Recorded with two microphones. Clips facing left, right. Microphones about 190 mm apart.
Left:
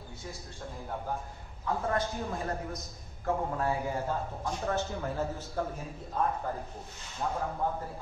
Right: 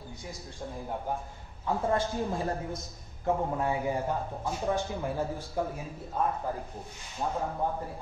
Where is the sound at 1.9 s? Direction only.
25° right (ahead or behind).